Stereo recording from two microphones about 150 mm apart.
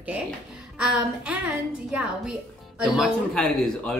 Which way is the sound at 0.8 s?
5° right (ahead or behind).